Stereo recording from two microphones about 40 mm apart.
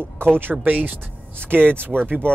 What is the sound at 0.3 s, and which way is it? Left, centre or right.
Speech, right.